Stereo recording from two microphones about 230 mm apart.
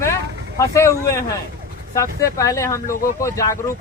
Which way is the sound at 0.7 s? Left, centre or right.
Centre.